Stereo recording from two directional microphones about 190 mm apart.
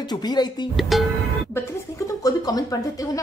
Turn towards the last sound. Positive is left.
turn(degrees=20)  # may be behind; listen again after turning